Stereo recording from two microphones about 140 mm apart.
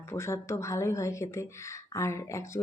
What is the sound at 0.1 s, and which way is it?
Speech, 20° left (ahead or behind).